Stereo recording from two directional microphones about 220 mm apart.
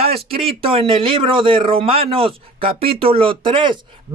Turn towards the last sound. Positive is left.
turn(degrees=-20)  # may be behind; listen again after turning